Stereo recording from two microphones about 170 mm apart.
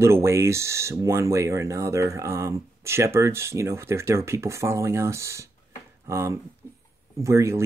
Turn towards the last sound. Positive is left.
turn(degrees=-15)  # may be behind; listen again after turning